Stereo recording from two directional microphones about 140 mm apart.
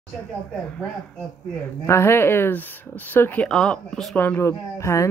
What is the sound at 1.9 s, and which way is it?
Speech, 20° left (ahead or behind).